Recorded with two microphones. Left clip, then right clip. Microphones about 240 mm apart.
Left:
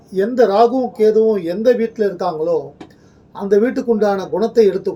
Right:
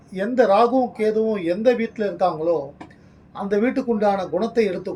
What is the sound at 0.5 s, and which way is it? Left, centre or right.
Speech, centre.